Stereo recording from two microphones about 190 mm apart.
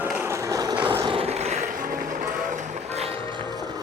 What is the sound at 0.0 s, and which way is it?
Vehicle, 10° right (ahead or behind).